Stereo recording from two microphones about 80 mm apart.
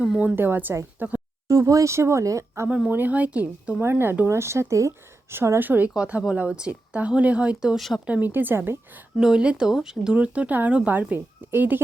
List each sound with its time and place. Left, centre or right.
0.2 s a woman's voice: right
0.9 s a sound: centre
1.5 s a woman's voice: right
2.6 s speech: centre
2.9 s a woman's voice: right
3.8 s a woman's voice: right; by 7.8 s centre
7.8 s speech: centre
8.0 s a woman's voice: centre
9.1 s a woman's voice: centre; by 11.8 s right